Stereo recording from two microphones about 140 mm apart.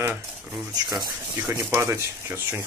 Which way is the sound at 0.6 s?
30° right (ahead or behind).